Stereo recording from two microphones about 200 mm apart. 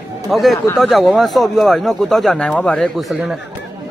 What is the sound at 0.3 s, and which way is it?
Speech, centre (ahead or behind).